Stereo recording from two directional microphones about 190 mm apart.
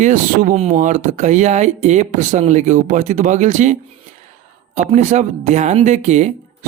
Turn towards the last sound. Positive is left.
turn(degrees=-35)  # may be behind; listen again after turning